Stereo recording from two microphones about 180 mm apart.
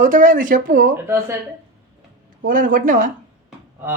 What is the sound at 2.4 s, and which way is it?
Speech, 45° right (ahead or behind).